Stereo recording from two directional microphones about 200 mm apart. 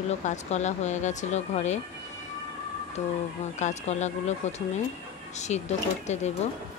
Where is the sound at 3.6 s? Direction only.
35° left (ahead or behind).